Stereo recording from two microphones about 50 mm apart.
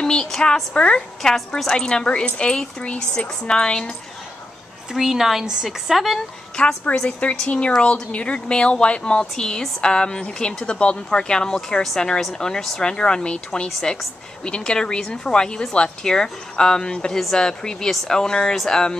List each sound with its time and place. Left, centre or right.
0.0 s speech: centre
1.6 s speech: centre
4.9 s a woman's voice: centre
7.0 s speech: left